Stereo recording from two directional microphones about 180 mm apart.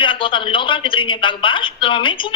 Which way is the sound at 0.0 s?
30° left (ahead or behind).